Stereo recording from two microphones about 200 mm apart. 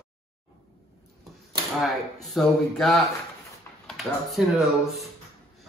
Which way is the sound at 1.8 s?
Centre (ahead or behind).